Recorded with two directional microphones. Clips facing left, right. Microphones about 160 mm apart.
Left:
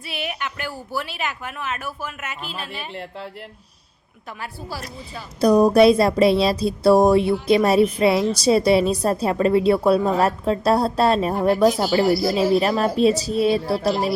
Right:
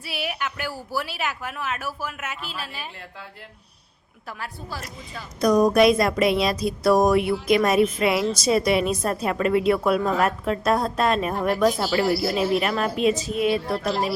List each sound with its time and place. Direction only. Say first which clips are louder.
0.0 s speech: even; 5° right (ahead or behind)
4.4 s speech: left 3 dB; 5° left (ahead or behind)
5.4 s a woman's voice: left 3 dB; 30° left (ahead or behind)